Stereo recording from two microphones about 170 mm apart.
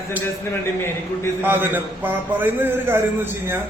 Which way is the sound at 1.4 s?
10° right (ahead or behind).